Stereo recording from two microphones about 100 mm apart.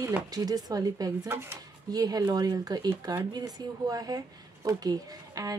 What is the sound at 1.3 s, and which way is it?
Speech, 25° right (ahead or behind).